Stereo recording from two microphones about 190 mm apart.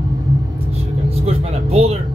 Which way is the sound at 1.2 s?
35° right (ahead or behind).